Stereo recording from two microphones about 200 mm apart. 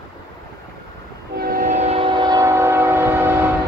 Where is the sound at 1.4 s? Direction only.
45° right (ahead or behind); by 3.5 s 10° right (ahead or behind).